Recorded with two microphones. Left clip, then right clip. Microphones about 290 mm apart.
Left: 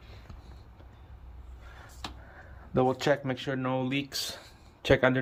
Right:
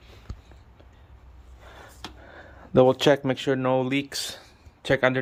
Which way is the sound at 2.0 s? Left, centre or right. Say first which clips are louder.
Even; right.